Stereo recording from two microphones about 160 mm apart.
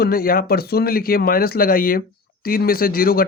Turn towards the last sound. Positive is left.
turn(degrees=65)  # may be behind; listen again after turning